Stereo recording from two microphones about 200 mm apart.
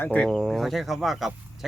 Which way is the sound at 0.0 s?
5° left (ahead or behind).